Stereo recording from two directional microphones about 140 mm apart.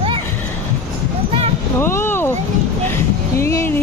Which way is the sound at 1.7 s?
15° left (ahead or behind).